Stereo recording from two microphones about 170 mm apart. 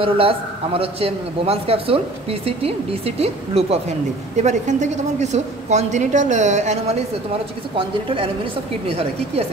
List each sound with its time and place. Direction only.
0.0 s a man's voice: 35° right (ahead or behind)
7.7 s a man's voice: 30° right (ahead or behind)